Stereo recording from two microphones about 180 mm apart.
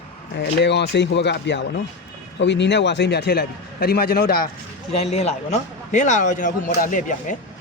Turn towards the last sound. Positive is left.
turn(degrees=45)  # may be behind; listen again after turning